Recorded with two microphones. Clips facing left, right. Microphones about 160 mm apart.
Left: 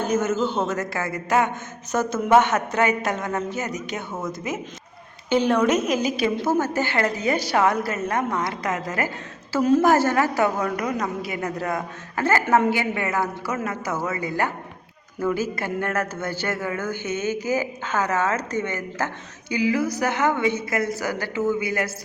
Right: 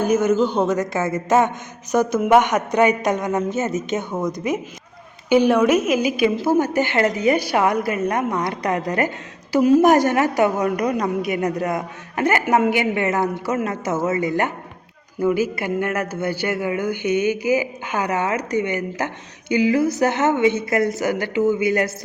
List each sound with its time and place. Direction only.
0.0 s a man's voice: 10° right (ahead or behind)